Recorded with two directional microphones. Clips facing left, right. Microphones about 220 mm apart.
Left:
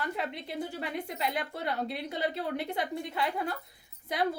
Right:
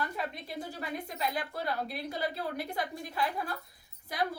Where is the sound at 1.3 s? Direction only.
25° left (ahead or behind).